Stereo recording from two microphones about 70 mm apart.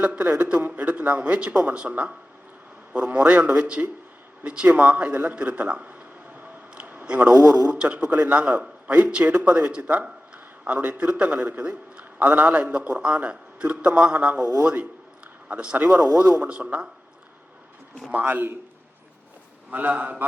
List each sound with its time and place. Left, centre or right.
0.0 s a man's voice: right
6.4 s a sound: right
7.7 s a man's voice: centre
18.1 s a man's voice: right
19.7 s a man's voice: right